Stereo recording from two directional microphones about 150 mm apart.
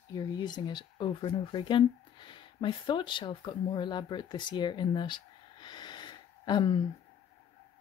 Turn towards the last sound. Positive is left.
turn(degrees=30)  # may be behind; listen again after turning